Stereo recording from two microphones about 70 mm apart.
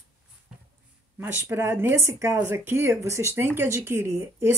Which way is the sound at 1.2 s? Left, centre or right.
Right.